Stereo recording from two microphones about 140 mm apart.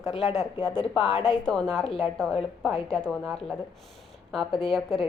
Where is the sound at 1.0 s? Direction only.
45° left (ahead or behind).